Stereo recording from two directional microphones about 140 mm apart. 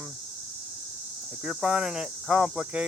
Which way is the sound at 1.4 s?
5° right (ahead or behind).